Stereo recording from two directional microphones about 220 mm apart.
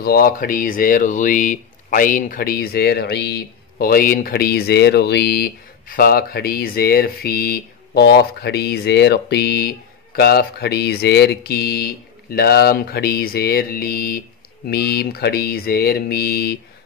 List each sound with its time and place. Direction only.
0.0 s speech: 45° left (ahead or behind)